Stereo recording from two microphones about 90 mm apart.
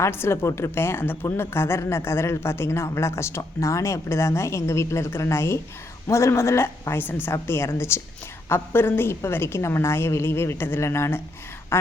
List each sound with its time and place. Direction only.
0.0 s a woman's voice: 30° left (ahead or behind)
11.7 s quack: 25° left (ahead or behind)